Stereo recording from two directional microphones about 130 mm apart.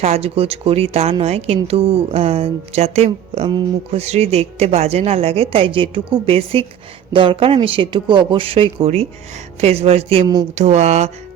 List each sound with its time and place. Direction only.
0.0 s speech: 55° right (ahead or behind)